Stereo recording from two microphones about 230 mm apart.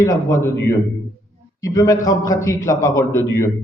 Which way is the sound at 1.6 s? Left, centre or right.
Centre.